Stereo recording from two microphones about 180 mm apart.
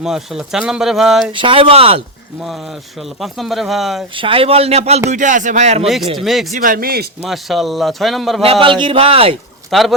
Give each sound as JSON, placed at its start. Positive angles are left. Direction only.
{"t": 0.0, "sound": "speech", "side_deg": -5}
{"t": 1.4, "sound": "speech", "side_deg": -30}
{"t": 3.2, "sound": "speech", "side_deg": 0}
{"t": 4.2, "sound": "speech", "side_deg": -30}
{"t": 6.1, "sound": "speech", "side_deg": 0}
{"t": 6.5, "sound": "speech", "side_deg": -50}
{"t": 7.3, "sound": "speech", "side_deg": 0}
{"t": 8.6, "sound": "speech", "side_deg": -25}
{"t": 9.6, "sound": "speech", "side_deg": 0}